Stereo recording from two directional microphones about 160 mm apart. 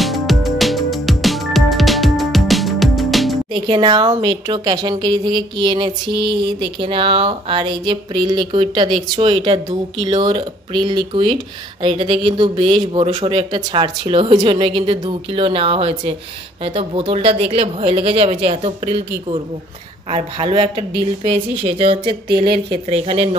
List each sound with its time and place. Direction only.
0.0 s music: centre (ahead or behind)
3.5 s speech: 30° right (ahead or behind)